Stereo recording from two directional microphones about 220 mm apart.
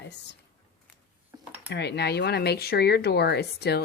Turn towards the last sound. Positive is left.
turn(degrees=50)  # may be behind; listen again after turning